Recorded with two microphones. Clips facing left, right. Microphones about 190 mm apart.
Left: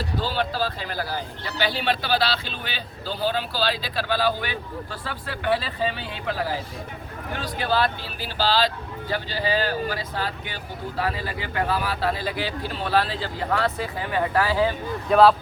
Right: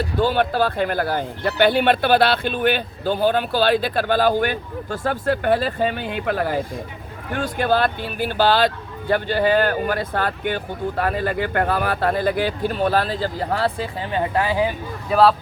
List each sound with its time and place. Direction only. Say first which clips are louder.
0.2 s a man's voice: right 8 dB; 55° right (ahead or behind); by 14.7 s 20° right (ahead or behind)
15.1 s speech: even; centre (ahead or behind)